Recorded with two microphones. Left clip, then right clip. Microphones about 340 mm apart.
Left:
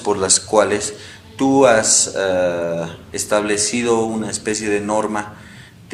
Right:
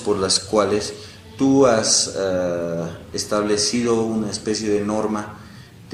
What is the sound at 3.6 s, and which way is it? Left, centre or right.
Speech, left.